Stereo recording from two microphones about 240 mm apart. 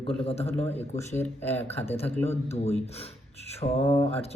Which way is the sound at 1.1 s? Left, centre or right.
Centre.